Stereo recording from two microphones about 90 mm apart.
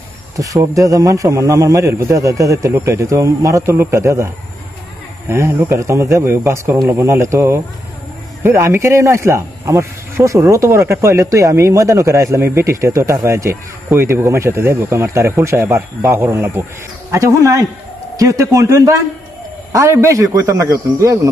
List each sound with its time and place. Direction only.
0.4 s speech: 40° right (ahead or behind)
5.3 s speech: 30° right (ahead or behind)